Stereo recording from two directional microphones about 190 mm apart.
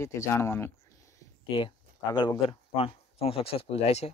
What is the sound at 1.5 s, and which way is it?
Speech, 25° left (ahead or behind).